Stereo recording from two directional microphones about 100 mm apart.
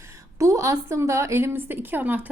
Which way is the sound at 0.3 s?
30° right (ahead or behind).